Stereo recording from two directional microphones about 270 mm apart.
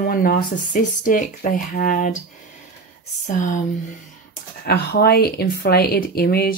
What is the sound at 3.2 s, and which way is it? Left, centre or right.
Speech, left.